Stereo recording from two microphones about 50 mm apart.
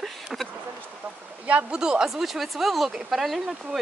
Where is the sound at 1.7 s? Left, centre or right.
Centre.